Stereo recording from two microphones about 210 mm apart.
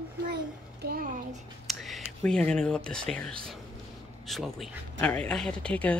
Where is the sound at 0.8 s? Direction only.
45° right (ahead or behind).